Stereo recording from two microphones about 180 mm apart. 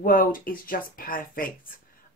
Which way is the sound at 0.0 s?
50° left (ahead or behind).